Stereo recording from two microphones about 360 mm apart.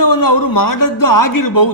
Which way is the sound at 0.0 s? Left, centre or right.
Left.